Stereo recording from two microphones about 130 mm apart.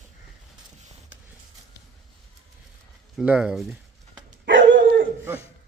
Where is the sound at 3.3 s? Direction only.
5° right (ahead or behind).